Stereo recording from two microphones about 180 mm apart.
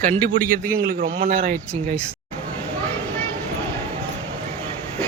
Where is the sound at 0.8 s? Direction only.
55° right (ahead or behind).